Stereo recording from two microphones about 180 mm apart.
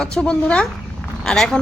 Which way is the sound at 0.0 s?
5° left (ahead or behind).